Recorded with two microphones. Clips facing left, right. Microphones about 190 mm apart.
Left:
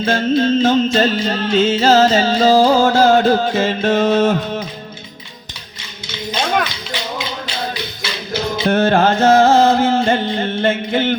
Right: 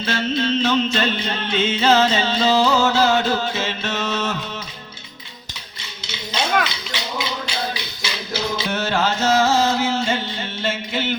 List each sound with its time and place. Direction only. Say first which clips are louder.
0.0 s music: left 7 dB; 50° left (ahead or behind)
8.3 s music: left 7 dB; 55° left (ahead or behind)